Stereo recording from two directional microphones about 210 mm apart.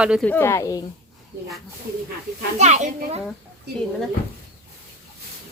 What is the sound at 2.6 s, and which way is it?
Speech, 35° right (ahead or behind).